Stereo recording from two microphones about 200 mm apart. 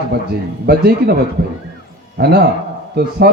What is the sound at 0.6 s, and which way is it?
Speech, 50° right (ahead or behind).